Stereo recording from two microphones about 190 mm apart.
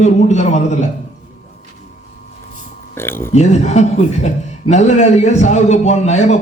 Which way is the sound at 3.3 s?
35° left (ahead or behind).